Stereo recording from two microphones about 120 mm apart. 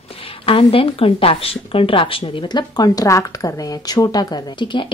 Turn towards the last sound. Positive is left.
turn(degrees=40)  # may be behind; listen again after turning